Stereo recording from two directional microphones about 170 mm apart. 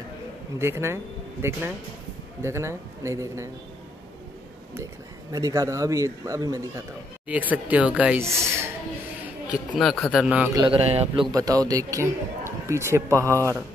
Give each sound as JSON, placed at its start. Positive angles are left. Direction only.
{"t": 0.6, "sound": "speech", "side_deg": -15}
{"t": 5.3, "sound": "a man's voice", "side_deg": -20}
{"t": 7.2, "sound": "speech", "side_deg": -10}
{"t": 9.8, "sound": "a man's voice", "side_deg": 0}
{"t": 10.5, "sound": "a man's voice", "side_deg": -30}
{"t": 11.3, "sound": "speech", "side_deg": -20}